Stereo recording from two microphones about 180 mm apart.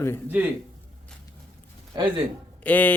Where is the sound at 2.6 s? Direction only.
10° left (ahead or behind).